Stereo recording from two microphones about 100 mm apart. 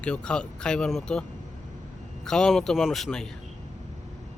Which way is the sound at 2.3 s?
5° left (ahead or behind).